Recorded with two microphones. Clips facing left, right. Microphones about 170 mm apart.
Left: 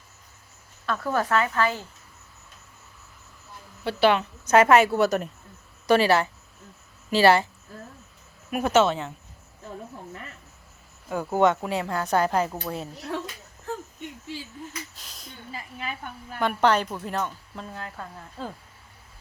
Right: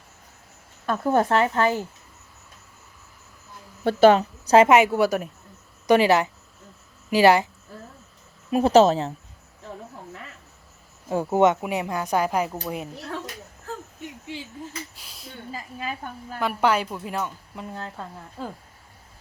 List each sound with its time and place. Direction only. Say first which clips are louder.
0.9 s a woman's voice: right 4 dB; 20° right (ahead or behind)
3.8 s a woman's voice: right 6 dB; 40° right (ahead or behind); by 7.4 s 15° right (ahead or behind)
8.4 s a woman's voice: right 5 dB; 30° right (ahead or behind)
11.1 s speech: right 2 dB; 25° right (ahead or behind)
14.9 s a sound: right 2 dB; 5° right (ahead or behind)
15.5 s a woman's voice: right 2 dB; 40° right (ahead or behind)
16.4 s speech: left 1 dB; 5° right (ahead or behind)
17.7 s a woman's voice: right 4 dB; 25° right (ahead or behind)
17.9 s speech: right 2 dB; 15° right (ahead or behind)